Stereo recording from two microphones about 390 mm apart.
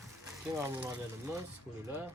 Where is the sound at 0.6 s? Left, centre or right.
Centre.